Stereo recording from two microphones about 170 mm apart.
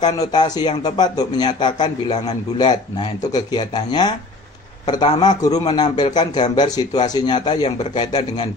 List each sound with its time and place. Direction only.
0.0 s a man's voice: 25° left (ahead or behind)